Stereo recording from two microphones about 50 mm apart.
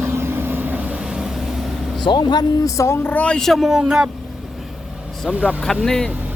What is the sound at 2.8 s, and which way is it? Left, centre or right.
Speech, left.